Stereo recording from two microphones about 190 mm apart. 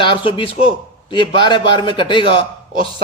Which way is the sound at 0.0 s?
25° left (ahead or behind).